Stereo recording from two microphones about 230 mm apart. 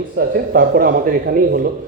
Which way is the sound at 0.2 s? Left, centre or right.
Right.